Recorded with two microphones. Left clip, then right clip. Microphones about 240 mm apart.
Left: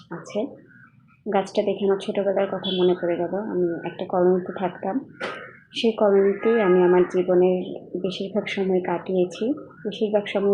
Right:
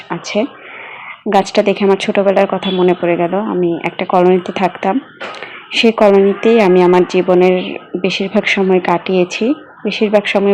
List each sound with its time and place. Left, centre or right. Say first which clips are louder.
1.3 s a woman's voice: right 11 dB; right